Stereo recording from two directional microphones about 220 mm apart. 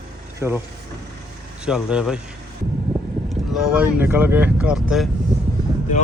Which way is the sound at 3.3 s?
5° right (ahead or behind).